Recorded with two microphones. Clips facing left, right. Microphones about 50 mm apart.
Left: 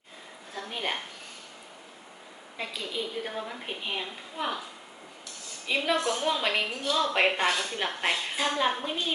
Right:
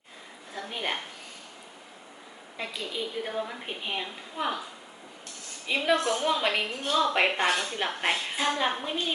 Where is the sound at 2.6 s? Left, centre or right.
Centre.